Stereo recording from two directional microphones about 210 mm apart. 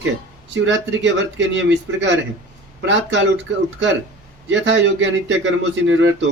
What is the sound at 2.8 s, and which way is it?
Speech, 60° right (ahead or behind).